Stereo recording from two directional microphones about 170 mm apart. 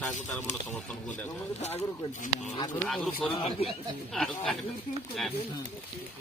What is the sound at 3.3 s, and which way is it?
Speech, 30° left (ahead or behind).